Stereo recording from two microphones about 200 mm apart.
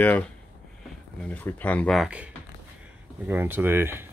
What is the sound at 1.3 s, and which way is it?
Speech, 5° left (ahead or behind).